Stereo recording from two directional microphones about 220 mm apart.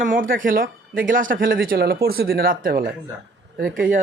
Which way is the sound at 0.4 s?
40° right (ahead or behind).